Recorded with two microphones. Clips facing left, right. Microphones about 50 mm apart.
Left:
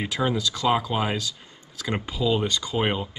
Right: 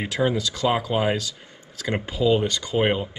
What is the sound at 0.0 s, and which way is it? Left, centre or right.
Speech, centre.